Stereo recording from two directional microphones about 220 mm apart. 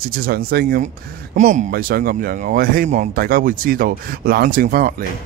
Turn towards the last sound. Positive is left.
turn(degrees=-40)  # may be behind; listen again after turning